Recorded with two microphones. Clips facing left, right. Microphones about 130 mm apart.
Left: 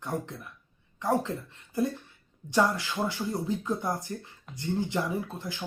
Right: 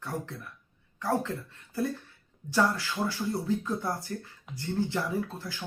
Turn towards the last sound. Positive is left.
turn(degrees=20)  # may be behind; listen again after turning